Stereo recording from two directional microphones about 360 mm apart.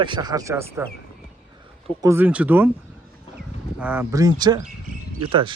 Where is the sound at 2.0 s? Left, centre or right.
Centre.